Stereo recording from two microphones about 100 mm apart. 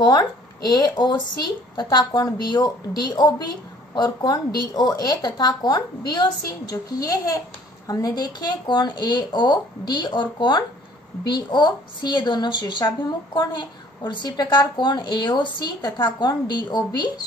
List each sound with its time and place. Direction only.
0.0 s a child's voice: 45° left (ahead or behind)